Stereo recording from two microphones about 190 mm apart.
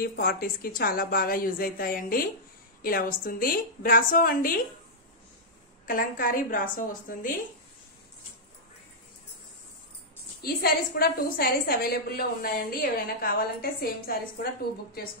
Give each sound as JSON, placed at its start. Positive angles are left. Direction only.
{"t": 0.0, "sound": "a woman's voice", "side_deg": 55}
{"t": 5.9, "sound": "a woman's voice", "side_deg": 50}
{"t": 10.4, "sound": "a woman's voice", "side_deg": 55}